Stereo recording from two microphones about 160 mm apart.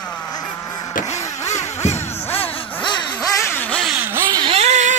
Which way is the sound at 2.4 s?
30° left (ahead or behind).